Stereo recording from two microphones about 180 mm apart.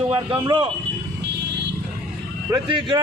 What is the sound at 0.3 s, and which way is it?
Speech, 25° right (ahead or behind).